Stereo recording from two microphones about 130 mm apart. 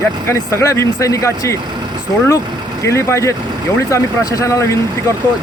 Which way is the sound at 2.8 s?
20° left (ahead or behind).